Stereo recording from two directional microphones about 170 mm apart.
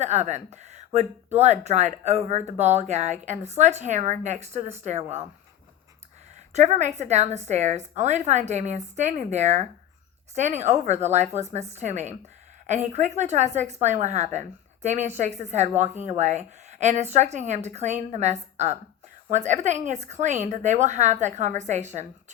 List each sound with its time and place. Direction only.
0.0 s a woman's voice: 40° right (ahead or behind)
6.5 s a woman's voice: 45° right (ahead or behind)